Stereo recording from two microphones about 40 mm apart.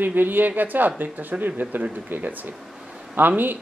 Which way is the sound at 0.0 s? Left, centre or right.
Right.